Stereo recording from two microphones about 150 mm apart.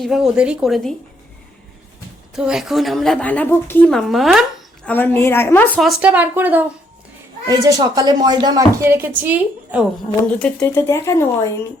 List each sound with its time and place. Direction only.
0.0 s a woman's voice: centre (ahead or behind)
2.3 s a woman's voice: 5° right (ahead or behind)
4.9 s speech: 10° left (ahead or behind)
5.8 s a woman's voice: 5° right (ahead or behind)
7.4 s speech: 25° right (ahead or behind)
8.8 s a woman's voice: 15° right (ahead or behind)
10.2 s speech: 10° left (ahead or behind)